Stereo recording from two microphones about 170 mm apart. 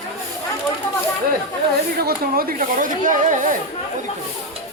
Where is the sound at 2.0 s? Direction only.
60° right (ahead or behind).